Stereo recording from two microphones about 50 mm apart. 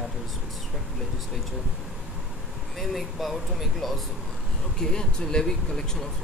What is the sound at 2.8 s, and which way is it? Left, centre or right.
Speech, centre.